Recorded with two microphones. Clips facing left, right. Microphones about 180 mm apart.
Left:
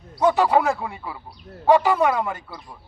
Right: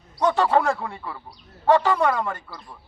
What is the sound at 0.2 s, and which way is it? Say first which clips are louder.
A man's voice: left 2 dB; 10° left (ahead or behind).